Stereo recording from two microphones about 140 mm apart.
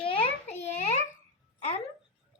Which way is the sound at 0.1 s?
45° left (ahead or behind).